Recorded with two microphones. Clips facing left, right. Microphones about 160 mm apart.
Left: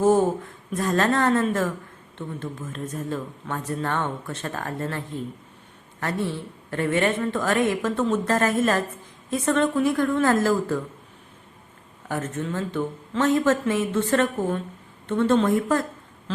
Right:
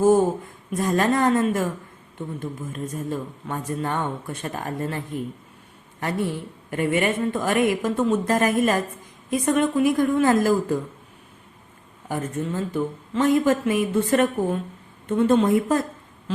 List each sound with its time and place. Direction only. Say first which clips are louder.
0.8 s speech: right 1 dB; 10° right (ahead or behind)
12.0 s speech: right 1 dB; 10° right (ahead or behind)